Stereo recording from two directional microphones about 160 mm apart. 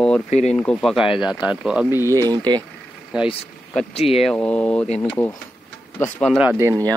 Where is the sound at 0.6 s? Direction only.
5° left (ahead or behind); by 2.1 s 15° right (ahead or behind).